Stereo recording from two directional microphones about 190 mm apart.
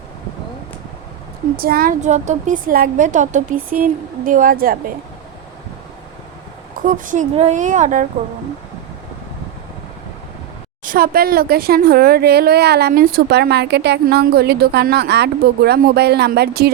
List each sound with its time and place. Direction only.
1.5 s a woman's voice: 50° right (ahead or behind)
6.8 s speech: 45° right (ahead or behind)
10.8 s a woman's voice: 50° right (ahead or behind)